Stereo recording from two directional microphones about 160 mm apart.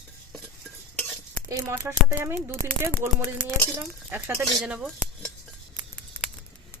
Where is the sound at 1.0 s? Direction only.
5° left (ahead or behind).